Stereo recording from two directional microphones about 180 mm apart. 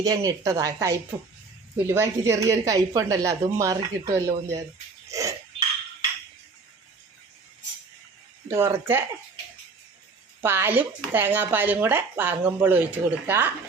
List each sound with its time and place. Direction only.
0.0 s speech: 20° right (ahead or behind)
5.1 s chink: 20° right (ahead or behind)
8.4 s speech: 15° right (ahead or behind)
10.4 s speech: 10° right (ahead or behind)